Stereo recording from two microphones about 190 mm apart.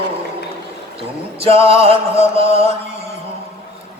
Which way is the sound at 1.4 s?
30° right (ahead or behind).